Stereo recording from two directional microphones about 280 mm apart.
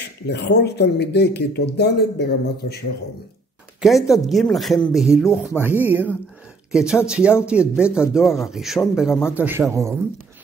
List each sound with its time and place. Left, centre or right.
0.3 s speech: left
3.8 s speech: centre